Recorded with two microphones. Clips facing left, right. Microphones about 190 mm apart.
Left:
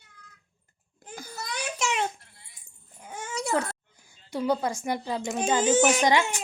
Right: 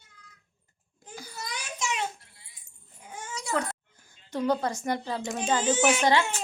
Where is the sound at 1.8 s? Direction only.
65° left (ahead or behind).